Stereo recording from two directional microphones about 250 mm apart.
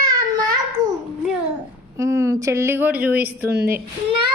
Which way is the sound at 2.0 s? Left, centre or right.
Centre.